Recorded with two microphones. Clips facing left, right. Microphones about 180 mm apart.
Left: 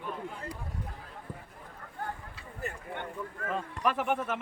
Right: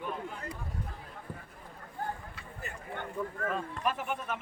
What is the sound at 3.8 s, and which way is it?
Speech, 70° left (ahead or behind).